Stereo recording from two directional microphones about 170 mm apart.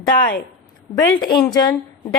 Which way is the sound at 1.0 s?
25° left (ahead or behind).